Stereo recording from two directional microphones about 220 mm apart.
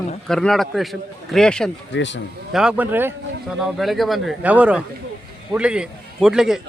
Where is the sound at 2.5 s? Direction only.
5° right (ahead or behind).